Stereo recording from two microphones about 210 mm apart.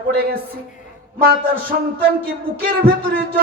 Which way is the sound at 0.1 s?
45° right (ahead or behind).